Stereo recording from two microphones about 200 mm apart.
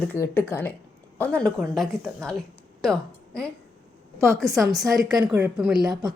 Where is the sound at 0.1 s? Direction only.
10° left (ahead or behind).